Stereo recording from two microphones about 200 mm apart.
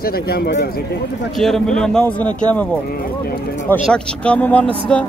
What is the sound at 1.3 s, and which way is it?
Speech, centre (ahead or behind).